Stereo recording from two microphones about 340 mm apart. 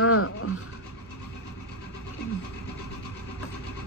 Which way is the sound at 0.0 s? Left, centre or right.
Left.